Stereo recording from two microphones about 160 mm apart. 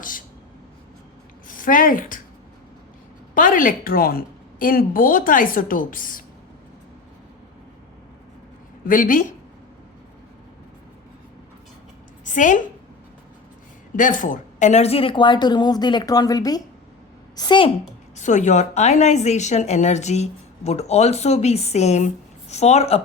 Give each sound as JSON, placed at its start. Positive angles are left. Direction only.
{"t": 1.5, "sound": "speech", "side_deg": 55}
{"t": 3.3, "sound": "a woman's voice", "side_deg": 55}
{"t": 8.9, "sound": "a woman's voice", "side_deg": 55}
{"t": 12.2, "sound": "a woman's voice", "side_deg": 50}
{"t": 13.9, "sound": "speech", "side_deg": 55}
{"t": 18.2, "sound": "a woman's voice", "side_deg": 50}